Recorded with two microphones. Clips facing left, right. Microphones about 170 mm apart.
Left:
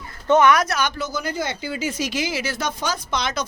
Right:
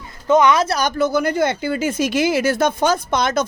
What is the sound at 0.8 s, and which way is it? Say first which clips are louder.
Speech: right 7 dB; 50° right (ahead or behind).